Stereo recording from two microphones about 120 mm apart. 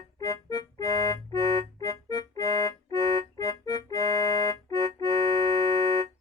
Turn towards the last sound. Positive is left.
turn(degrees=30)  # may be behind; listen again after turning